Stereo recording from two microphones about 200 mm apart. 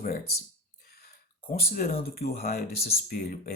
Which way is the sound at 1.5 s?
45° left (ahead or behind).